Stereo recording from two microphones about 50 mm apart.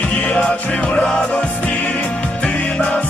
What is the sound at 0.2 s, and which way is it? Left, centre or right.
Music, left.